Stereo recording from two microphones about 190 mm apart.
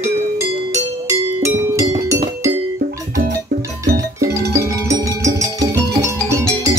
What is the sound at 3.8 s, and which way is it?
Music, 15° right (ahead or behind).